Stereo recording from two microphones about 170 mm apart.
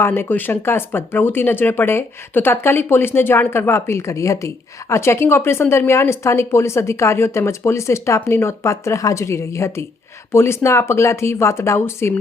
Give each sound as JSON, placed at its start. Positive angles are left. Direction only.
{"t": 0.0, "sound": "speech", "side_deg": 10}